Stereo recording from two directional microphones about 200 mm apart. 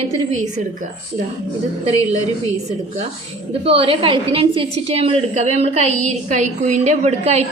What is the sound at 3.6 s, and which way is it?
A woman's voice, 30° right (ahead or behind).